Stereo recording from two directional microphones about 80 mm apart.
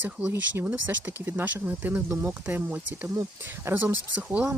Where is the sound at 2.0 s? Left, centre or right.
Right.